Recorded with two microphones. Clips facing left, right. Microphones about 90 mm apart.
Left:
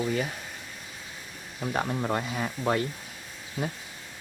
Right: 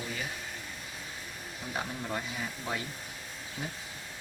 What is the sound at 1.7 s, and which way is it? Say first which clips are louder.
Speech: left 7 dB; 65° left (ahead or behind).